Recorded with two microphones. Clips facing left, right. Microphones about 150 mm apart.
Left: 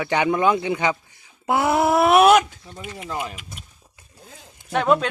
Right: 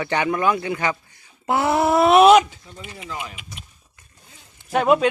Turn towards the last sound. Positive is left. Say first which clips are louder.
# right 2 dB
turn(degrees=-5)  # may be behind; listen again after turning